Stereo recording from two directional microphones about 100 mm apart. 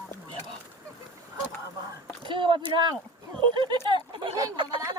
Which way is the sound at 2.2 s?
55° right (ahead or behind).